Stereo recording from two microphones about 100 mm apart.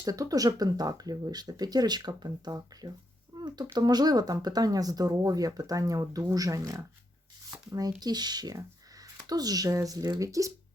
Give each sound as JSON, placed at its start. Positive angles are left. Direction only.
{"t": 0.0, "sound": "speech", "side_deg": -40}